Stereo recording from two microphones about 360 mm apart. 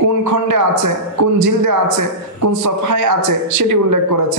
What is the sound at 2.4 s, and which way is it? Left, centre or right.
A woman's voice, right.